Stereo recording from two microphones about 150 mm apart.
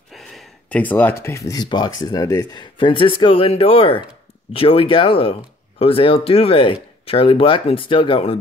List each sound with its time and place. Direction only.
0.1 s gasp: centre (ahead or behind)
1.2 s speech: 20° left (ahead or behind); by 8.4 s 40° left (ahead or behind)